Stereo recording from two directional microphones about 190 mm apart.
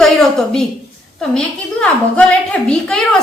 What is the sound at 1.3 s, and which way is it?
A woman's voice, 5° left (ahead or behind).